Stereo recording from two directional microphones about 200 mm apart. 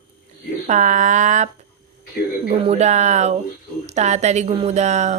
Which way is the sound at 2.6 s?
35° right (ahead or behind).